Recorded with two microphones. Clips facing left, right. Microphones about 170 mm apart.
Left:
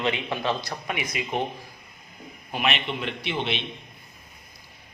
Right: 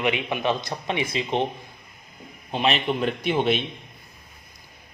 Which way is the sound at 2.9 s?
45° right (ahead or behind).